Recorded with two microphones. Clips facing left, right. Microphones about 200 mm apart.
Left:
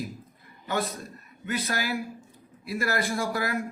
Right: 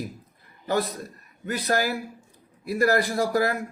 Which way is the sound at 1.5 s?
40° right (ahead or behind).